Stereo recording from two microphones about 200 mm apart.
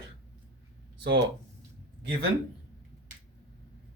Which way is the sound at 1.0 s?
60° right (ahead or behind).